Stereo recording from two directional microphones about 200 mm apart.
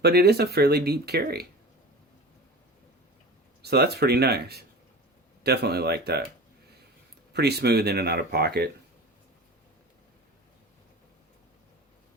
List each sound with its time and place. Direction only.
0.0 s speech: 50° right (ahead or behind)
3.6 s speech: 55° right (ahead or behind)
7.3 s speech: 55° right (ahead or behind)